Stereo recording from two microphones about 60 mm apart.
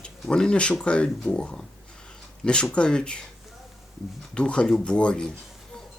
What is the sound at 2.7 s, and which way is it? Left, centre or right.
Speech, centre.